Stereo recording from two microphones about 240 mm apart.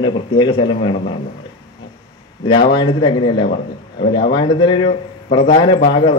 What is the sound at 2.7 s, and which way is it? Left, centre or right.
A man's voice, centre.